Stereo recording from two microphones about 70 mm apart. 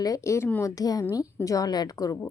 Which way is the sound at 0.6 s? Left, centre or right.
Left.